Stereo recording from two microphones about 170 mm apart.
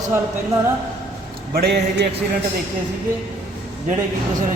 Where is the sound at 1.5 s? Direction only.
70° right (ahead or behind).